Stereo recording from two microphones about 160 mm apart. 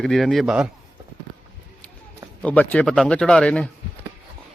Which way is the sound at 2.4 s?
10° left (ahead or behind).